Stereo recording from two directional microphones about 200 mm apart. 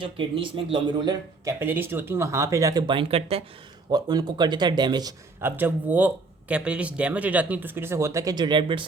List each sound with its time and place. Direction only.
0.0 s speech: 25° right (ahead or behind)